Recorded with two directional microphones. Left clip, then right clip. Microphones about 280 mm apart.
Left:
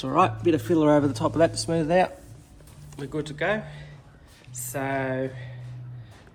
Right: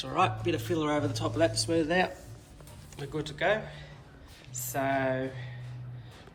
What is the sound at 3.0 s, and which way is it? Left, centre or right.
Speech, centre.